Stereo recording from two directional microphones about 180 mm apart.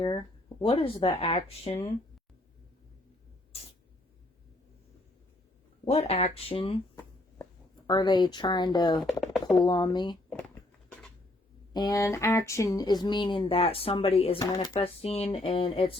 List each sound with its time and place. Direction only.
0.0 s speech: 25° left (ahead or behind)
5.8 s speech: 35° left (ahead or behind)
7.9 s speech: 25° left (ahead or behind)
9.2 s a sound: centre (ahead or behind)
9.6 s speech: 25° left (ahead or behind)
10.5 s a sound: 5° left (ahead or behind)
11.7 s speech: 20° left (ahead or behind)
14.5 s speech: 20° left (ahead or behind)
14.8 s speech: 35° left (ahead or behind)